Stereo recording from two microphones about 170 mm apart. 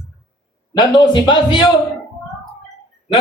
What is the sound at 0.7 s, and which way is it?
Speech, 25° left (ahead or behind).